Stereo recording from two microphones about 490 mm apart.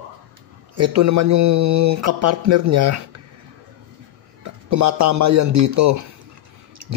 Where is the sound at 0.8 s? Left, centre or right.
Right.